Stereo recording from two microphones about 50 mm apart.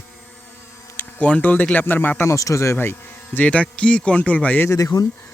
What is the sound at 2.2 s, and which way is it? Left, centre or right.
Speech, left.